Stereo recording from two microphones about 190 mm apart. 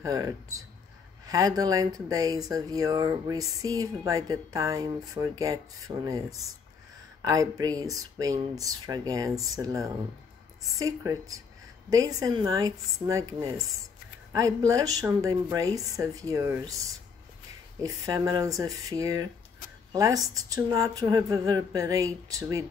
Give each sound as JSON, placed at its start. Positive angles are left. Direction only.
{"t": 0.0, "sound": "speech", "side_deg": -20}
{"t": 11.1, "sound": "speech", "side_deg": -20}
{"t": 14.7, "sound": "speech", "side_deg": -20}